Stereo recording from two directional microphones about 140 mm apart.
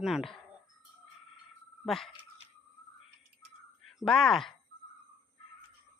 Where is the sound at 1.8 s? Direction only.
Centre (ahead or behind).